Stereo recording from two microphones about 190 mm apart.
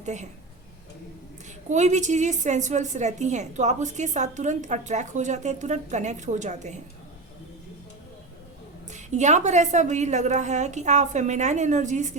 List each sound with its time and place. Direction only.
0.0 s a woman's voice: 40° right (ahead or behind)
1.7 s a woman's voice: 40° right (ahead or behind)
8.9 s a woman's voice: 40° right (ahead or behind)